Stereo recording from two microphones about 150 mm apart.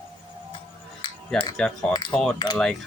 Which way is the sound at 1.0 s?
30° left (ahead or behind).